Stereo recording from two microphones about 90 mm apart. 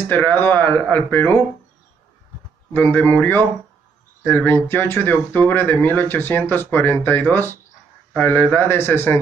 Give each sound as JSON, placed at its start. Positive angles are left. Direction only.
{"t": 0.1, "sound": "speech", "side_deg": 20}
{"t": 2.7, "sound": "speech", "side_deg": 20}